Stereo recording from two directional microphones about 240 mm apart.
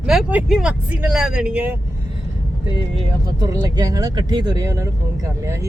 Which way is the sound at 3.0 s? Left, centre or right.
Centre.